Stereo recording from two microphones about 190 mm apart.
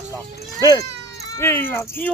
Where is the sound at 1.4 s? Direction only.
15° left (ahead or behind).